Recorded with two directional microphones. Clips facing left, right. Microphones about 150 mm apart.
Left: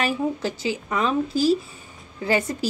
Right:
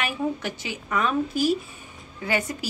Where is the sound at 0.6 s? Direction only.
30° left (ahead or behind).